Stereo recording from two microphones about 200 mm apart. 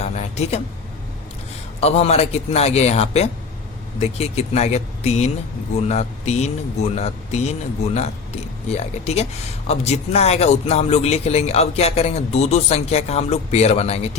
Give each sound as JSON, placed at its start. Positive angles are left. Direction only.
{"t": 0.0, "sound": "a sound", "side_deg": 35}
{"t": 1.8, "sound": "a man's voice", "side_deg": 30}
{"t": 8.7, "sound": "a man's voice", "side_deg": 30}